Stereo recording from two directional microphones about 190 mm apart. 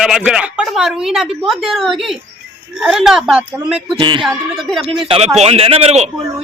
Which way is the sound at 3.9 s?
25° right (ahead or behind).